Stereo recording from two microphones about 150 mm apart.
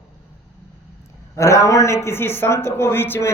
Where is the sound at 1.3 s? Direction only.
20° left (ahead or behind).